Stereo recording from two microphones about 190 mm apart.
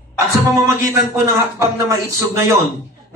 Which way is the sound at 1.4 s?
15° right (ahead or behind).